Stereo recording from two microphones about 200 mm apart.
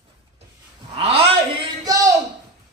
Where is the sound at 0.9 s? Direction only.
25° right (ahead or behind).